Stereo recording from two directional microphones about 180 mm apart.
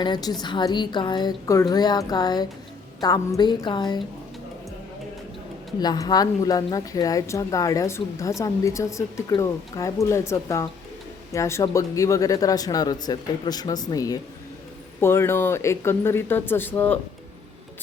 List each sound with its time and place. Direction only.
0.0 s speech: 25° left (ahead or behind)
5.8 s a woman's voice: 20° left (ahead or behind)